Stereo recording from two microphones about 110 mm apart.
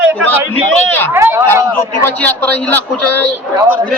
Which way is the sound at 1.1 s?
20° right (ahead or behind).